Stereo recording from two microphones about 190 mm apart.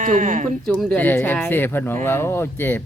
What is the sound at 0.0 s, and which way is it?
Speech, 45° right (ahead or behind).